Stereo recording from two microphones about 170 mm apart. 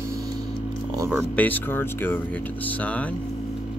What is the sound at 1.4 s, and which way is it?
Speech, 10° left (ahead or behind).